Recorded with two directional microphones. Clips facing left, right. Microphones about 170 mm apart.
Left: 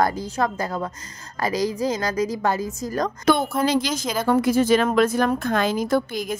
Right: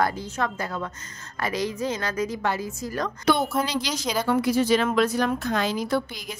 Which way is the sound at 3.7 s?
50° left (ahead or behind).